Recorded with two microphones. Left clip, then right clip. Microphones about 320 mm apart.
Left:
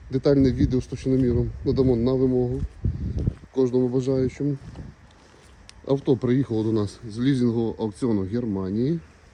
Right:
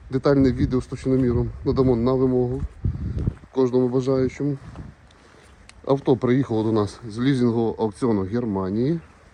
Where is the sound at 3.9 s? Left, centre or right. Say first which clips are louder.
Right 2 dB; centre.